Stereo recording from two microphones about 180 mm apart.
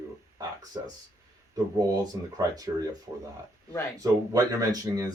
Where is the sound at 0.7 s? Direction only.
20° right (ahead or behind).